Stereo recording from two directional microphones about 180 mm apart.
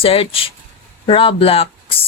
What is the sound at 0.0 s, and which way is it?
Speech, 30° left (ahead or behind).